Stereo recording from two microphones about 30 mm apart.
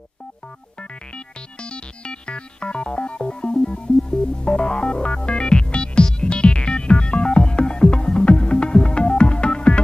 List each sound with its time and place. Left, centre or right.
1.6 s music: left